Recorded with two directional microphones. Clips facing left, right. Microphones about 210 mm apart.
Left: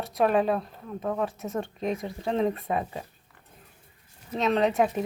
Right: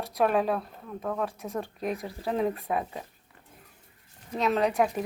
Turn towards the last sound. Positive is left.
turn(degrees=0)  # may be behind; listen again after turning